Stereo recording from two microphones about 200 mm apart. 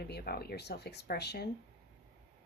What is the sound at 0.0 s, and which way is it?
Speech, 50° left (ahead or behind).